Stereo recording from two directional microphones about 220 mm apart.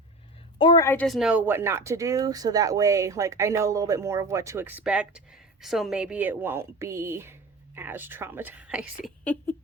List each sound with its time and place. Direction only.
0.6 s a woman's voice: 20° left (ahead or behind)
0.9 s speech: 5° left (ahead or behind)
9.2 s speech: 10° left (ahead or behind)